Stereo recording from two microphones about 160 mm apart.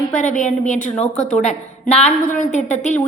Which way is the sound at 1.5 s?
45° left (ahead or behind).